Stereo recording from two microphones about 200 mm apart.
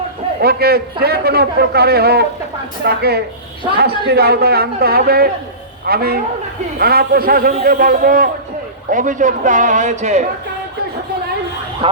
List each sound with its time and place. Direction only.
0.4 s a man's voice: 50° right (ahead or behind)